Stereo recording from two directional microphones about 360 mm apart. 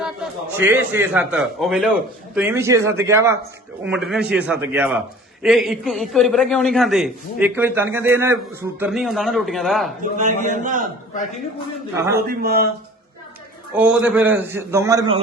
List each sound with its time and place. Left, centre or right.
0.0 s a man's voice: centre
10.0 s a man's voice: centre
12.3 s a man's voice: right
13.7 s a man's voice: centre